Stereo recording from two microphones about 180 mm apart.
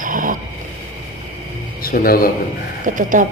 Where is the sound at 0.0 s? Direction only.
45° right (ahead or behind).